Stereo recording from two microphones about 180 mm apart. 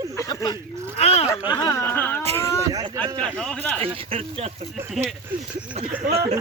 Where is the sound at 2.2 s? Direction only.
35° right (ahead or behind).